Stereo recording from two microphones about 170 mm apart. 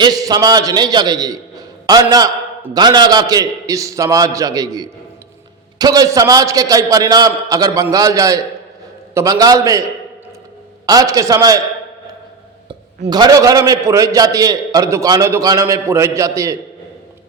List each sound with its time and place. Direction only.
0.0 s a man's voice: 20° right (ahead or behind)
10.8 s a man's voice: 20° right (ahead or behind)
13.1 s a man's voice: 25° right (ahead or behind)